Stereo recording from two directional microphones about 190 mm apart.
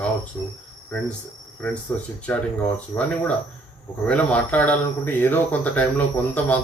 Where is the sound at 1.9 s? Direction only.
10° left (ahead or behind).